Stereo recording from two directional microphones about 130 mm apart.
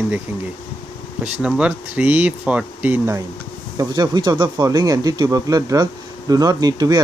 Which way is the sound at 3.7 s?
30° right (ahead or behind).